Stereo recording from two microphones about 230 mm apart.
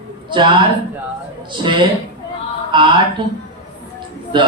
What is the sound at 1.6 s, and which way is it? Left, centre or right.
A man's voice, right.